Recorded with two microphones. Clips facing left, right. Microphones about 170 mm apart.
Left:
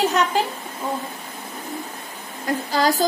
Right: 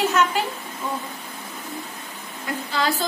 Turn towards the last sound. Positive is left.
turn(degrees=40)  # may be behind; listen again after turning